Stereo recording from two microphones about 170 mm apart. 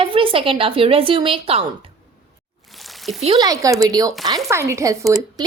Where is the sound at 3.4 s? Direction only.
20° right (ahead or behind).